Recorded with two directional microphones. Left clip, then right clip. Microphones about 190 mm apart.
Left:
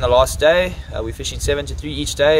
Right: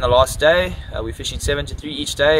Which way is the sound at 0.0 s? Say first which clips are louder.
Left 1 dB; 15° left (ahead or behind).